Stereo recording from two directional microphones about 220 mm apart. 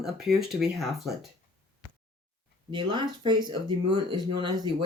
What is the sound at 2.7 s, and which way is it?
Speech, 20° right (ahead or behind).